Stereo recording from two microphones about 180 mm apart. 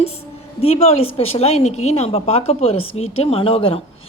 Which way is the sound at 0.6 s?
35° left (ahead or behind).